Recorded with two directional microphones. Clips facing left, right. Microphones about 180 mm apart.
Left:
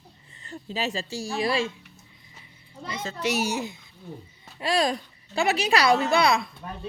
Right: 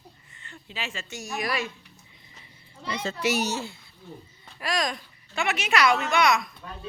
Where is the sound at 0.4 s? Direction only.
40° left (ahead or behind).